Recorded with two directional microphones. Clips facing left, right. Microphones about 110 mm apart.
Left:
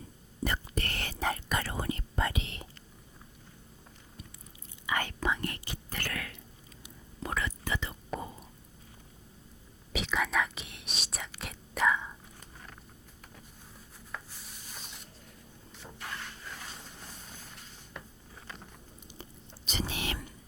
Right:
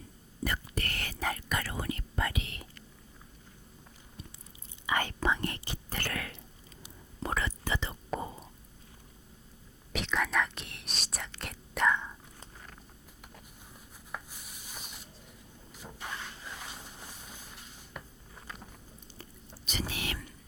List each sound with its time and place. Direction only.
0.4 s whispering: 25° left (ahead or behind)
4.9 s whispering: 30° right (ahead or behind)
9.9 s whispering: centre (ahead or behind)
14.1 s rub: 15° right (ahead or behind)
16.0 s dog: 15° right (ahead or behind)
18.0 s a sound: 5° right (ahead or behind)
19.6 s whispering: 25° left (ahead or behind)